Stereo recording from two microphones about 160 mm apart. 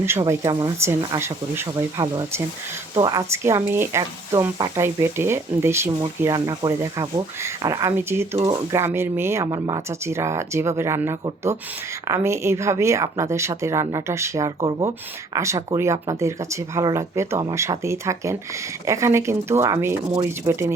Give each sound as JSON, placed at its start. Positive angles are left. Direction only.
{"t": 0.0, "sound": "speech", "side_deg": -15}
{"t": 14.6, "sound": "speech", "side_deg": -30}
{"t": 15.4, "sound": "speech", "side_deg": -20}